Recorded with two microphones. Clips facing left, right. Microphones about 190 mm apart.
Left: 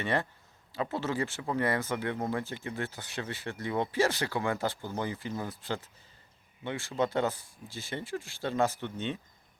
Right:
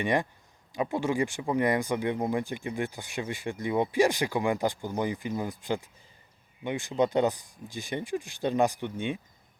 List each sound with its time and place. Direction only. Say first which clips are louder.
0.0 s speech: right 4 dB; 15° right (ahead or behind)